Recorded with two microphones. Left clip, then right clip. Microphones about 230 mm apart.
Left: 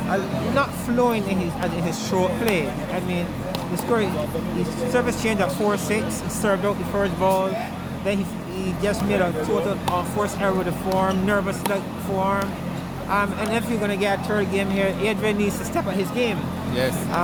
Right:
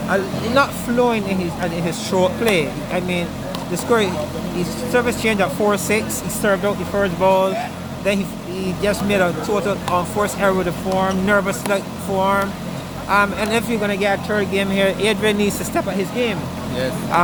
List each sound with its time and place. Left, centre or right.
0.1 s speech: right
0.9 s speech: centre
8.8 s speech: right